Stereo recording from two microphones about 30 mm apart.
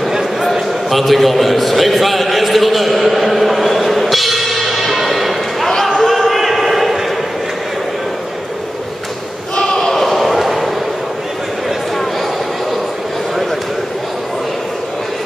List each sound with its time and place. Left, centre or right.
0.6 s a sound: centre
5.7 s basketball bounce: centre
6.1 s basketball bounce: centre
9.6 s basketball bounce: centre